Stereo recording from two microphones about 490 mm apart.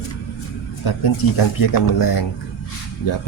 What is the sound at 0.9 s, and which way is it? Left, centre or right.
Speech, left.